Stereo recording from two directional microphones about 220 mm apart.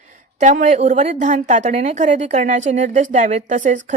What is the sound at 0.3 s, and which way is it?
A woman's voice, 35° right (ahead or behind).